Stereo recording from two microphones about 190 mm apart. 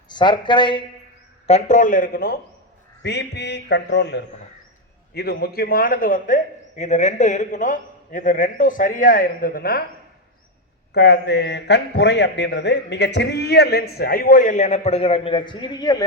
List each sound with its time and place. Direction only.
0.1 s speech: 25° left (ahead or behind)
1.5 s a man's voice: 35° left (ahead or behind)
3.0 s a man's voice: 65° left (ahead or behind)
5.1 s a man's voice: 55° left (ahead or behind)
10.9 s a man's voice: 60° left (ahead or behind); by 16.0 s 20° left (ahead or behind)